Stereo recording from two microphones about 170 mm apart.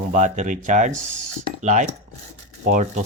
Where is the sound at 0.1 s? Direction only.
45° right (ahead or behind).